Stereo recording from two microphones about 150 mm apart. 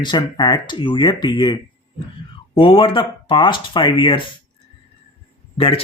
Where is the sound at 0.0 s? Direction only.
30° left (ahead or behind).